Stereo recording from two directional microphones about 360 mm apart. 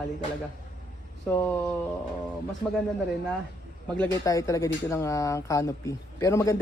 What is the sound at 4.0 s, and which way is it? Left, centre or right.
Speech, centre.